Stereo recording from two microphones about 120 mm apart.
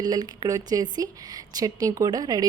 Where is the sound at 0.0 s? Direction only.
35° right (ahead or behind).